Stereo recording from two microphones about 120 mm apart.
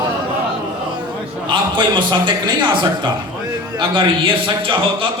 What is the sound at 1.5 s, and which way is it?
A man's voice, 40° right (ahead or behind).